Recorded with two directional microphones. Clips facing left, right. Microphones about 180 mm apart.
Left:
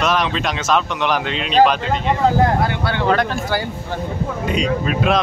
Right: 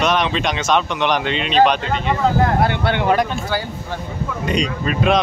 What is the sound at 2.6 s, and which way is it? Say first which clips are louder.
Speech: right 2 dB; 25° right (ahead or behind).